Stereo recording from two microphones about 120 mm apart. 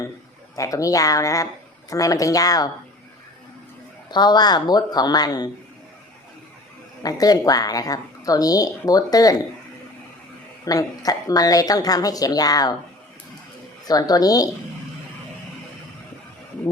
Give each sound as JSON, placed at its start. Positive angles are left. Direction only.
{"t": 0.5, "sound": "speech", "side_deg": 30}
{"t": 4.1, "sound": "speech", "side_deg": 35}
{"t": 7.0, "sound": "speech", "side_deg": 30}
{"t": 10.7, "sound": "speech", "side_deg": 30}
{"t": 13.8, "sound": "speech", "side_deg": 30}